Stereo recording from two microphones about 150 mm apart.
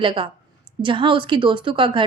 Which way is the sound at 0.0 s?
30° right (ahead or behind).